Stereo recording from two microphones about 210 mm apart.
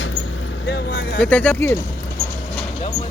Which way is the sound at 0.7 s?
55° left (ahead or behind).